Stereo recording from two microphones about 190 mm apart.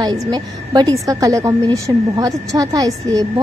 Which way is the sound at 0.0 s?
20° right (ahead or behind).